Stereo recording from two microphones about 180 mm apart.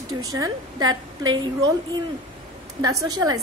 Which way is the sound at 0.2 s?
20° right (ahead or behind).